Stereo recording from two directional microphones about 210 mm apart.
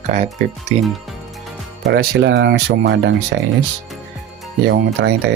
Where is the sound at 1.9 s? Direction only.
55° right (ahead or behind).